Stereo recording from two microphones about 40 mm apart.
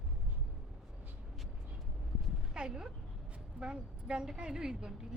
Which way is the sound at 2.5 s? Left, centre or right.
Right.